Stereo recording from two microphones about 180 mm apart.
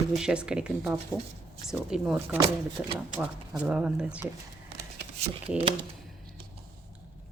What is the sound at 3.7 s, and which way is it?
Speech, 5° right (ahead or behind).